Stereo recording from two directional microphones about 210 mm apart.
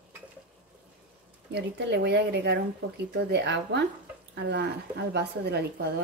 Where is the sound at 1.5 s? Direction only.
55° right (ahead or behind).